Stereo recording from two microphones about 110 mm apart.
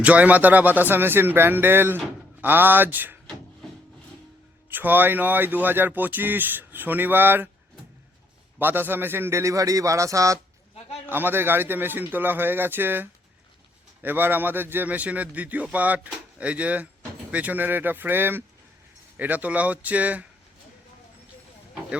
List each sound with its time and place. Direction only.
0.0 s a man's voice: 15° right (ahead or behind)
4.7 s speech: 15° right (ahead or behind)
8.5 s a man's voice: 20° right (ahead or behind)
11.0 s a man's voice: 20° right (ahead or behind)